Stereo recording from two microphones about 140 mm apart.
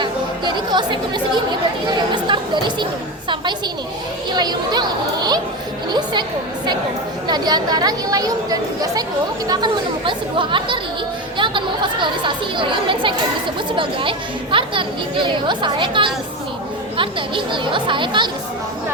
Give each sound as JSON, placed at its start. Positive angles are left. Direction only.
{"t": 0.0, "sound": "chatter", "side_deg": -35}
{"t": 4.3, "sound": "a woman's voice", "side_deg": -30}
{"t": 7.3, "sound": "speech", "side_deg": -30}
{"t": 10.1, "sound": "speech", "side_deg": -35}